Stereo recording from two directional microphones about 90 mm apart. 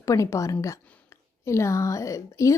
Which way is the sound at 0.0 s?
35° left (ahead or behind).